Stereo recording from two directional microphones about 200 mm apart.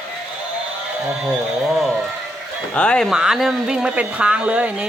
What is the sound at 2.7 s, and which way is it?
Speech, 5° left (ahead or behind).